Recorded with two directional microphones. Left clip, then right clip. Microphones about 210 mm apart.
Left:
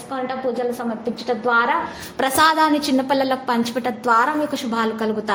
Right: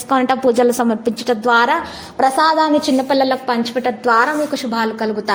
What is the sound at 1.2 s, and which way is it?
Speech, 35° right (ahead or behind).